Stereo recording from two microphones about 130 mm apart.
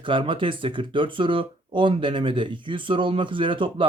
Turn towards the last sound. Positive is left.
turn(degrees=-40)  # may be behind; listen again after turning